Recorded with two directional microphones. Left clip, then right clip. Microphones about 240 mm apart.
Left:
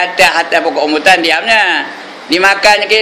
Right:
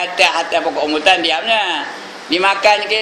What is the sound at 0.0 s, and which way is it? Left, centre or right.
A man's voice, centre.